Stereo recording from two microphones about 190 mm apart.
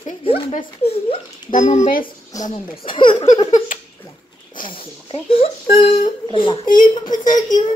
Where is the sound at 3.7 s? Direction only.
45° left (ahead or behind).